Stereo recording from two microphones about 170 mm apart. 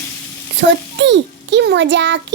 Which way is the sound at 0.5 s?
90° right.